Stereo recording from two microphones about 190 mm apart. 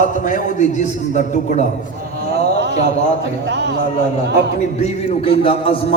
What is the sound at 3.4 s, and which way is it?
Speech, 65° right (ahead or behind).